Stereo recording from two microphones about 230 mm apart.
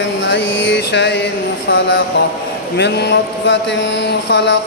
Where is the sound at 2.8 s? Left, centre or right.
Left.